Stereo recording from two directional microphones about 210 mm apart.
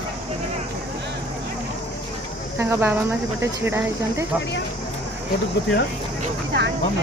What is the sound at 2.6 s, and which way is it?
Speech, 10° right (ahead or behind).